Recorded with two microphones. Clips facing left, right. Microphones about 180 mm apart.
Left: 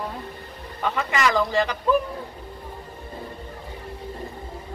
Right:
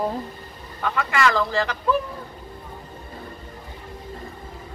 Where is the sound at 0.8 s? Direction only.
20° left (ahead or behind).